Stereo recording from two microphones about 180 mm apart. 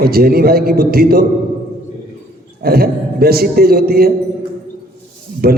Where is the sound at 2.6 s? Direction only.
60° right (ahead or behind).